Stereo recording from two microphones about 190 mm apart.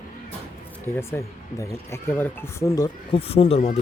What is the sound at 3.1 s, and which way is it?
Speech, 30° left (ahead or behind).